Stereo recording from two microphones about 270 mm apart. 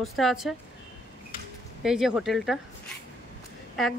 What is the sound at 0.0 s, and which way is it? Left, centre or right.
Speech, centre.